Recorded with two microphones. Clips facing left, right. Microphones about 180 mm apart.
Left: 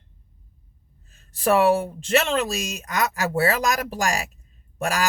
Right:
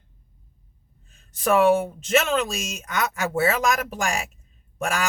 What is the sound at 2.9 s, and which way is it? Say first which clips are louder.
Speech: left 1 dB; 35° left (ahead or behind).